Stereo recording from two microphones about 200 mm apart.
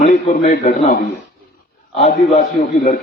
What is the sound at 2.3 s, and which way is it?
Speech, 40° left (ahead or behind).